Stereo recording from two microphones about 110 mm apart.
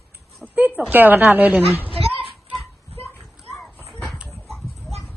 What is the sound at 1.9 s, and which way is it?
Children playing, 55° right (ahead or behind).